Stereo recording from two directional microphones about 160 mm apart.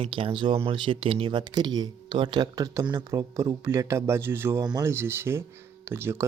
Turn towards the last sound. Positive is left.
turn(degrees=-15)  # may be behind; listen again after turning